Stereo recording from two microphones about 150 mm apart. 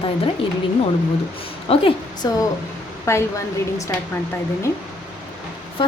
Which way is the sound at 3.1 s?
20° left (ahead or behind).